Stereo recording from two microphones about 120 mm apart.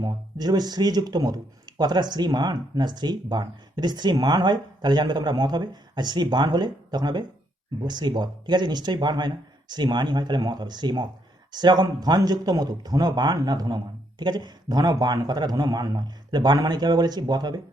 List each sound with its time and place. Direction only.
0.0 s speech: 35° right (ahead or behind)